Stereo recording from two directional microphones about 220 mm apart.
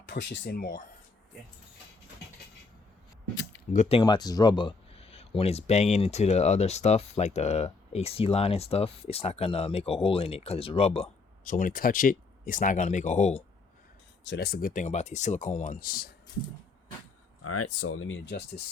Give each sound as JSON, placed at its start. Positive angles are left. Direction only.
{"t": 0.0, "sound": "speech", "side_deg": 55}
{"t": 3.7, "sound": "speech", "side_deg": 30}
{"t": 14.3, "sound": "speech", "side_deg": 45}
{"t": 17.4, "sound": "speech", "side_deg": 90}